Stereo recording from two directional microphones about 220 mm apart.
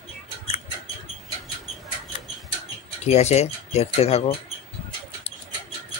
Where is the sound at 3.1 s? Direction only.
30° left (ahead or behind).